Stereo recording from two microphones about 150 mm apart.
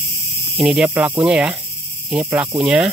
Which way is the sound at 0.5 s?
5° right (ahead or behind).